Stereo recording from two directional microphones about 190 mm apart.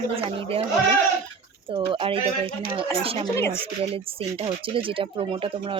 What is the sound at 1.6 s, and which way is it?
Speech, 25° right (ahead or behind).